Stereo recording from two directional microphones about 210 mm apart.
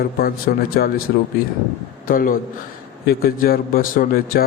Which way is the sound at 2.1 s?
40° left (ahead or behind).